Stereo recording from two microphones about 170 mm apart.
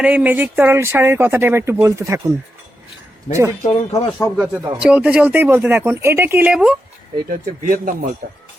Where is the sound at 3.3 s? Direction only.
15° right (ahead or behind).